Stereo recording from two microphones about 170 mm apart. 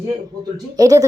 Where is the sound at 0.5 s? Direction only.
20° right (ahead or behind).